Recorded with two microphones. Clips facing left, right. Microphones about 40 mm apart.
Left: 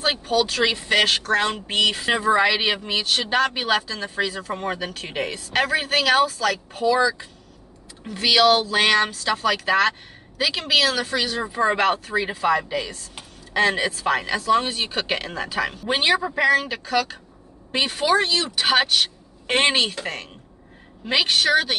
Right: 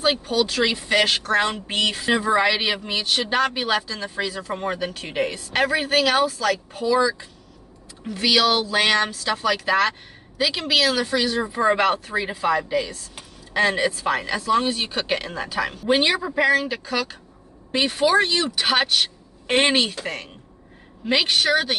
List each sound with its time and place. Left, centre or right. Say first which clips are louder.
0.3 s speech: left 1 dB; centre
1.9 s speech: even; centre
3.8 s speech: left 2 dB; centre
8.6 s speech: left 1 dB; centre
21.0 s speech: even; centre